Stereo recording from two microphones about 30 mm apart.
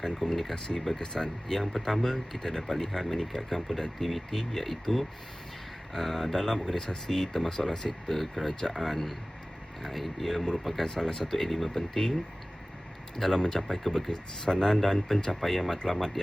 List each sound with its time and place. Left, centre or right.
0.2 s speech: centre
1.8 s speech: centre
6.7 s speech: left
7.8 s speech: left
8.1 s speech: centre
13.1 s speech: centre
15.4 s speech: centre